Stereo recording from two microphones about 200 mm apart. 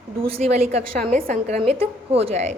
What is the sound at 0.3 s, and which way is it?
A woman's voice, 30° right (ahead or behind).